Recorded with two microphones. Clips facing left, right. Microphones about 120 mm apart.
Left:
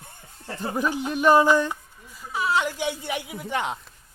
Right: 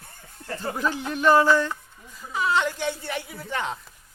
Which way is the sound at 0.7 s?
15° left (ahead or behind).